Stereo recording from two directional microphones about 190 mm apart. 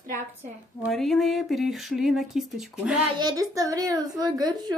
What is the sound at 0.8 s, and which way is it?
Speech, centre (ahead or behind).